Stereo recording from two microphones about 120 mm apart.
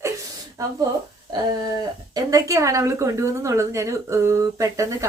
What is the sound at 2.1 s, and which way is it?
A woman's voice, 30° right (ahead or behind).